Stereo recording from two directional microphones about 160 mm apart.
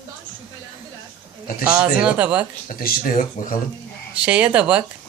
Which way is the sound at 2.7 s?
60° left (ahead or behind).